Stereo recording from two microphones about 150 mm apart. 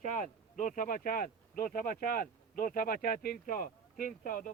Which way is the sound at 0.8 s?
65° left (ahead or behind).